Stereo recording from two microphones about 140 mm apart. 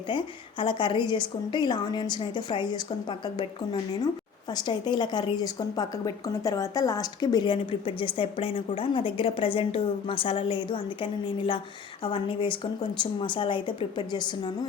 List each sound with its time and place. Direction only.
0.1 s a woman's voice: 35° left (ahead or behind)